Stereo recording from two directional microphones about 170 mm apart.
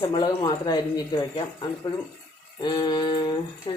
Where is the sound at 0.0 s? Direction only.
25° left (ahead or behind).